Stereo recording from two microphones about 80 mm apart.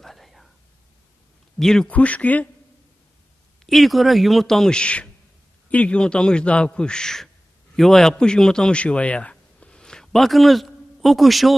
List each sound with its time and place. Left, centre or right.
0.0 s whispering: centre
1.6 s a man's voice: centre
1.9 s speech: centre
3.6 s a man's voice: centre